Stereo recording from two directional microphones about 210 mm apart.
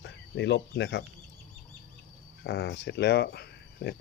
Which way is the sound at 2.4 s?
55° left (ahead or behind).